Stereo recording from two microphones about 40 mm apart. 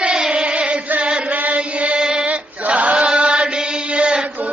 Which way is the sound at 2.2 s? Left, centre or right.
Right.